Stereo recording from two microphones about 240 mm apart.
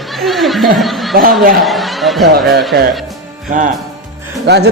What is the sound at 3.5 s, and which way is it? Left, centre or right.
Speech, right.